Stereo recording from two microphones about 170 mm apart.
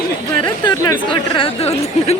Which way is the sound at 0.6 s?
20° left (ahead or behind).